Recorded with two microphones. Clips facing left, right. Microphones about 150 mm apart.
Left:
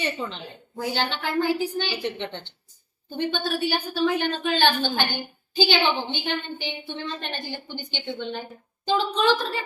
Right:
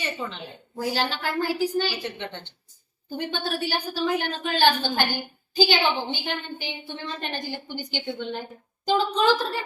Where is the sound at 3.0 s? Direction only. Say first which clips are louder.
Left 2 dB; 5° right (ahead or behind).